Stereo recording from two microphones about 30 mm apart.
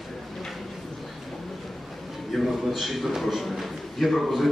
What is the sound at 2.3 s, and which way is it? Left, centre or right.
A man's voice, centre.